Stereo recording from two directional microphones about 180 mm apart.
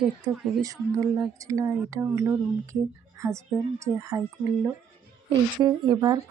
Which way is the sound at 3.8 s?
15° right (ahead or behind).